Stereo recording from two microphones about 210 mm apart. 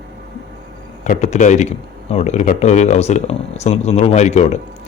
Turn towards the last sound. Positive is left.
turn(degrees=30)  # may be behind; listen again after turning